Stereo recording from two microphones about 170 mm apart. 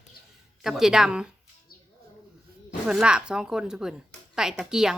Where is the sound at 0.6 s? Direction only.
Centre (ahead or behind).